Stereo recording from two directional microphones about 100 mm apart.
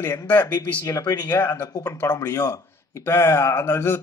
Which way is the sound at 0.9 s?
35° left (ahead or behind).